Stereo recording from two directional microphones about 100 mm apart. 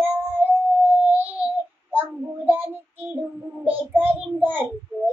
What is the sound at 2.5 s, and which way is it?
Child singing, 20° right (ahead or behind).